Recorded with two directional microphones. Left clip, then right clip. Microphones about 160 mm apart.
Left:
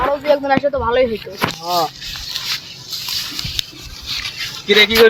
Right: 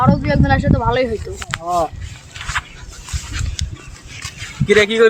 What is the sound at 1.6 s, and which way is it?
Speech, 25° left (ahead or behind).